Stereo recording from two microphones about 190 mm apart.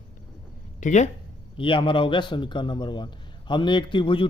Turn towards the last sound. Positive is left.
turn(degrees=25)  # may be behind; listen again after turning